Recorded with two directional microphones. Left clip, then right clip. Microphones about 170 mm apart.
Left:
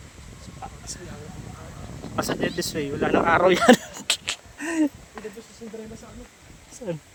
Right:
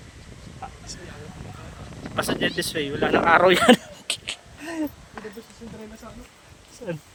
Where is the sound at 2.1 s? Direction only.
15° left (ahead or behind).